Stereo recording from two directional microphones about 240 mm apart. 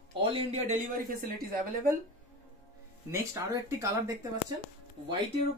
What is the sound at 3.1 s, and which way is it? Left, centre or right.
Speech, centre.